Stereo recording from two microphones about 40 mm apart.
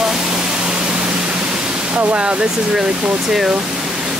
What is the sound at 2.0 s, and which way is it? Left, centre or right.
Speech, right.